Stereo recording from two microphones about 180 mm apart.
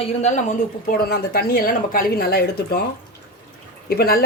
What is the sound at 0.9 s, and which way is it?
Speech, 60° left (ahead or behind).